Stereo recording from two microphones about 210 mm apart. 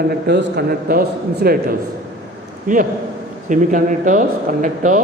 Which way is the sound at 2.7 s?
40° right (ahead or behind).